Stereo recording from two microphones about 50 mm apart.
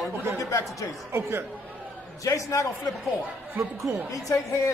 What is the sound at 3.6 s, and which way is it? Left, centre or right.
Speech, right.